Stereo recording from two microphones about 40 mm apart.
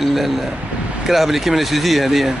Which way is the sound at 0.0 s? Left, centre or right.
Centre.